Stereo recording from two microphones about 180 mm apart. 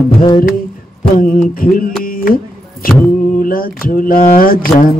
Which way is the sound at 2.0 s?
50° left (ahead or behind).